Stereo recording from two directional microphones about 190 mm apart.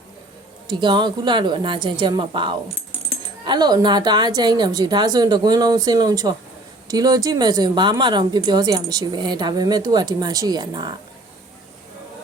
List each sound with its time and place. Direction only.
0.7 s speech: 25° right (ahead or behind)